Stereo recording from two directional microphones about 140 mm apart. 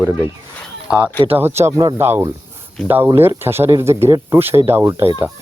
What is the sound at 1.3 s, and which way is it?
Speech, 15° right (ahead or behind).